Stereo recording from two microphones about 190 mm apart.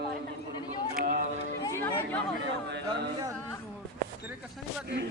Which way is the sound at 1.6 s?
15° left (ahead or behind).